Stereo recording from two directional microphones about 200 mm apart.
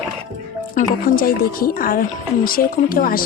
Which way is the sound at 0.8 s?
45° left (ahead or behind).